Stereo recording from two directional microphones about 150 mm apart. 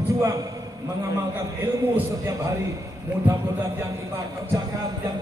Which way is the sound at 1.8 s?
20° right (ahead or behind).